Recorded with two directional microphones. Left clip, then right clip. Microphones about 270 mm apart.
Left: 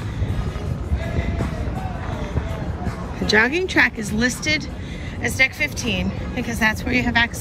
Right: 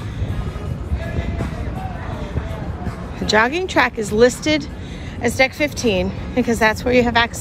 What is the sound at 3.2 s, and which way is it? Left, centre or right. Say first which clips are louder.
Speech: right 1 dB; centre.